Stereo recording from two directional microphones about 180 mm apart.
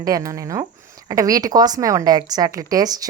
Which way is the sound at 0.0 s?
20° right (ahead or behind).